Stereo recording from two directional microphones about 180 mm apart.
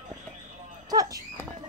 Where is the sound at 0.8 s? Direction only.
20° right (ahead or behind).